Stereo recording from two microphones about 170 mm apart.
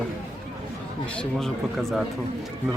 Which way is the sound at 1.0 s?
5° left (ahead or behind).